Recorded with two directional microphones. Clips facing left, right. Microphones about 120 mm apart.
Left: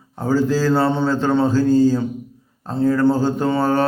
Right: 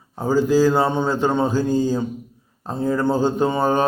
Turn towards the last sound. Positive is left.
turn(degrees=-15)  # may be behind; listen again after turning